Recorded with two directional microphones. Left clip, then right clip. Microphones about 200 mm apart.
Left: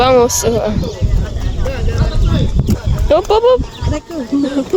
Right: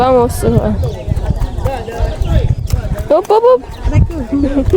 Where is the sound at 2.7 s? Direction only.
15° right (ahead or behind).